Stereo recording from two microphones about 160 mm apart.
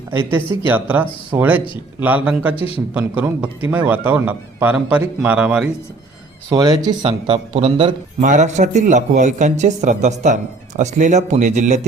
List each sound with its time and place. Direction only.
0.1 s a man's voice: 15° right (ahead or behind)
2.6 s speech: 35° left (ahead or behind)
2.9 s a man's voice: 10° right (ahead or behind)
6.5 s speech: 25° right (ahead or behind)
7.0 s speech: 40° right (ahead or behind)
8.2 s speech: 50° right (ahead or behind)